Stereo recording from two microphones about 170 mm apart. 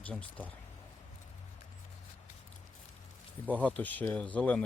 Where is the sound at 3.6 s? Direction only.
10° left (ahead or behind).